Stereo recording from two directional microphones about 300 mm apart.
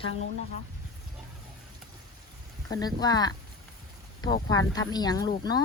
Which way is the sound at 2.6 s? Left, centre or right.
Centre.